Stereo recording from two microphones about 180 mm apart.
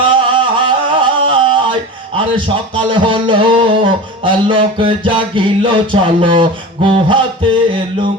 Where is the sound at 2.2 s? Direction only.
30° right (ahead or behind).